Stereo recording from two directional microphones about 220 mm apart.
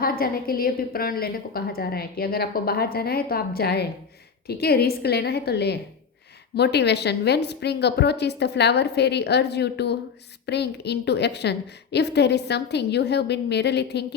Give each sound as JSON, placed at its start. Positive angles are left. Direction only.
{"t": 0.0, "sound": "a woman's voice", "side_deg": 40}